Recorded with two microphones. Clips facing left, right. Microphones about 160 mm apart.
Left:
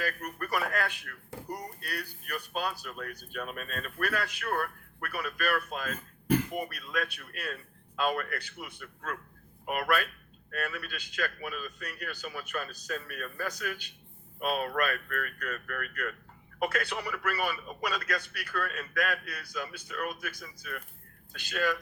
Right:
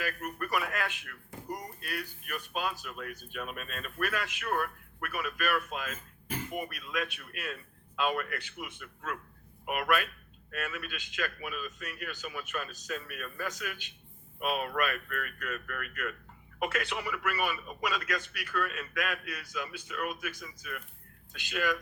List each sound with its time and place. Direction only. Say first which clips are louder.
0.3 s a man's voice: left 2 dB; 40° left (ahead or behind)